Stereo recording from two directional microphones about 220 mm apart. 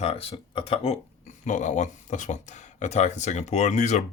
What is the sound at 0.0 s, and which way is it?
Speech, 25° left (ahead or behind).